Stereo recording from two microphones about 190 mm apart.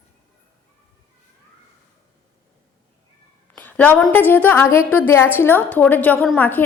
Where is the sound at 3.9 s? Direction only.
10° left (ahead or behind).